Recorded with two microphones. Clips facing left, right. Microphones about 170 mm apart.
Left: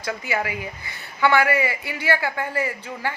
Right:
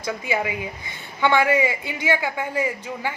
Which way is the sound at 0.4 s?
20° right (ahead or behind).